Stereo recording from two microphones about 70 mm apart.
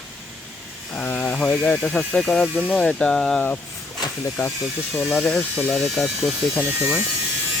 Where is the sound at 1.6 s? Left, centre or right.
Centre.